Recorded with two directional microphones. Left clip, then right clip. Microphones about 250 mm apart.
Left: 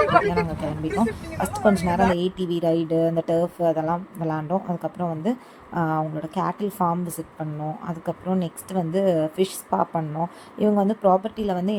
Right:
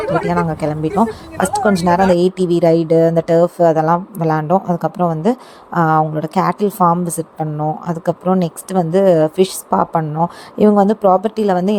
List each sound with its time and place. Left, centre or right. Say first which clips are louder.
0.3 s speech: right 7 dB; right